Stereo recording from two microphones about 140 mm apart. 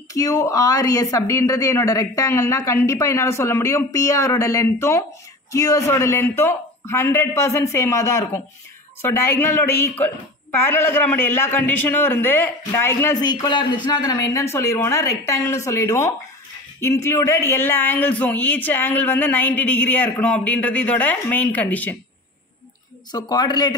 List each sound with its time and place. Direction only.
0.1 s speech: 20° left (ahead or behind)
13.2 s a man's voice: 30° left (ahead or behind); by 21.9 s 10° left (ahead or behind)
23.1 s speech: 30° left (ahead or behind)